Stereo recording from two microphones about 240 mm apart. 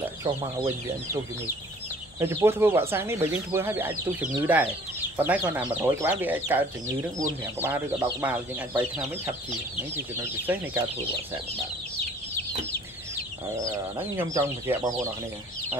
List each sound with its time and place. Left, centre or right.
0.2 s speech: right
2.1 s speech: centre
13.9 s speech: centre